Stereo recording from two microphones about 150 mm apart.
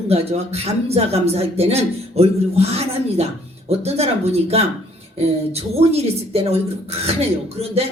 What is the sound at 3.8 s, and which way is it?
Speech, 45° right (ahead or behind).